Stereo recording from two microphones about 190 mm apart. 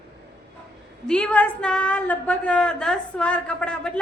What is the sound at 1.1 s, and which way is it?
A woman's voice, 5° left (ahead or behind).